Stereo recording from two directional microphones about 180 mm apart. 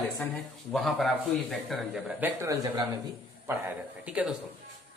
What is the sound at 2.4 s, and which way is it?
Speech, 20° right (ahead or behind).